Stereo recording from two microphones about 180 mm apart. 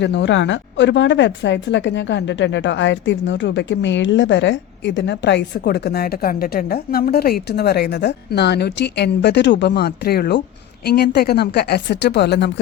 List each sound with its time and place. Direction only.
0.0 s a woman's voice: 75° left (ahead or behind)